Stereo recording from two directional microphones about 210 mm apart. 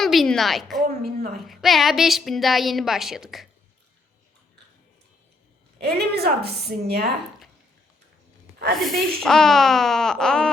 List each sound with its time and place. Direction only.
0.0 s a woman's voice: centre (ahead or behind)
0.9 s a woman's voice: 45° right (ahead or behind)
1.4 s a woman's voice: centre (ahead or behind)
5.8 s a woman's voice: 50° right (ahead or behind)
8.8 s a woman's voice: centre (ahead or behind)